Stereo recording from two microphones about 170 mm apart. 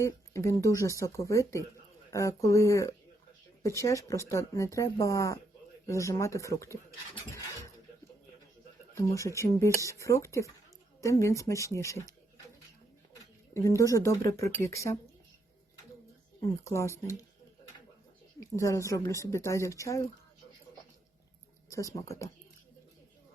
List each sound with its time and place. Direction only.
0.0 s speech: 20° left (ahead or behind)
9.0 s speech: 15° left (ahead or behind)
13.5 s speech: 20° left (ahead or behind)
16.6 s speech: 15° left (ahead or behind)
18.3 s speech: 20° left (ahead or behind)
21.7 s speech: 20° left (ahead or behind)